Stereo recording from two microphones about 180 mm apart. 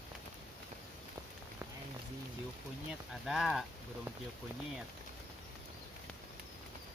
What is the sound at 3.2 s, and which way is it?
Speech, centre (ahead or behind).